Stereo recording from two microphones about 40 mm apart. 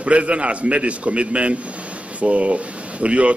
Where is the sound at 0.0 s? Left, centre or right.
Right.